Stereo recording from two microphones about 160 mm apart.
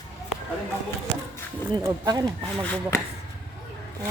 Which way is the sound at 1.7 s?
20° right (ahead or behind).